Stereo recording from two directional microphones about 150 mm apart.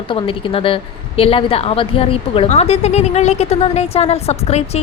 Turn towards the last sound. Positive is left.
turn(degrees=45)  # may be behind; listen again after turning